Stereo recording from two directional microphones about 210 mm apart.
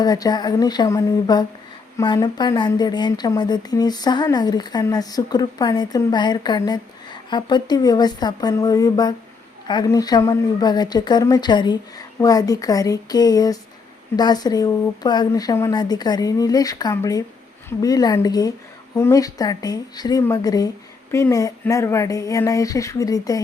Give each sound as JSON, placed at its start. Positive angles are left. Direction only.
{"t": 0.0, "sound": "speech", "side_deg": 20}